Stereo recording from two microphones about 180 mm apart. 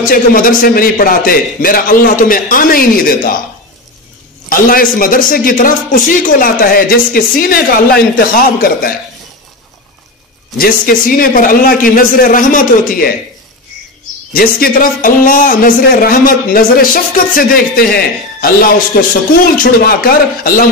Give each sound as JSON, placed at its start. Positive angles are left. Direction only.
{"t": 0.0, "sound": "a man's voice", "side_deg": 50}
{"t": 4.5, "sound": "a man's voice", "side_deg": 55}
{"t": 10.6, "sound": "a man's voice", "side_deg": 55}
{"t": 14.3, "sound": "a man's voice", "side_deg": 50}
{"t": 19.5, "sound": "a man's voice", "side_deg": 50}